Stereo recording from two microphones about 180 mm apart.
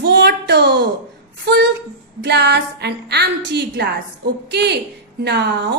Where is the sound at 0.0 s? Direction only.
70° right (ahead or behind).